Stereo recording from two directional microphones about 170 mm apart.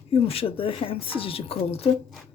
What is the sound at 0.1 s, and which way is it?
Speech, 35° left (ahead or behind).